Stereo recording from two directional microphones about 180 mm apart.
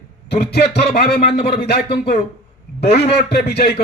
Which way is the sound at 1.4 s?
60° left (ahead or behind).